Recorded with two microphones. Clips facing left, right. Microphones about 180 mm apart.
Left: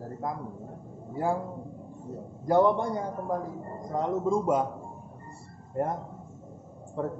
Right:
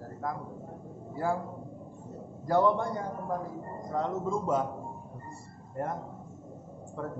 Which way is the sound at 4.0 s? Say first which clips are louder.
Left 5 dB; 15° left (ahead or behind).